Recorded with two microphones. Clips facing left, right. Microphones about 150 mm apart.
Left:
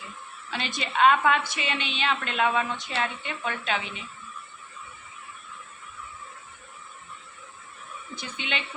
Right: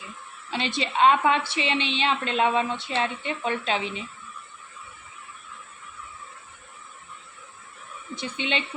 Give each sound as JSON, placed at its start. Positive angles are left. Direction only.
{"t": 0.5, "sound": "a woman's voice", "side_deg": -25}
{"t": 8.1, "sound": "a woman's voice", "side_deg": -25}